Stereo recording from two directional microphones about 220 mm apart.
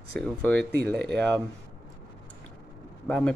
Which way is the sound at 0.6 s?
50° right (ahead or behind).